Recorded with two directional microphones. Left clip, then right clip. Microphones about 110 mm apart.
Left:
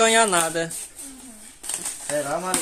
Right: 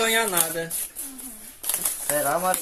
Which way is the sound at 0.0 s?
55° left (ahead or behind).